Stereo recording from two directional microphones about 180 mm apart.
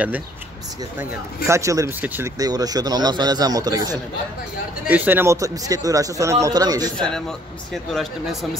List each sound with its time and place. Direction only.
1.5 s a man's voice: 15° right (ahead or behind)
4.8 s a man's voice: 10° right (ahead or behind)
7.0 s speech: 5° left (ahead or behind)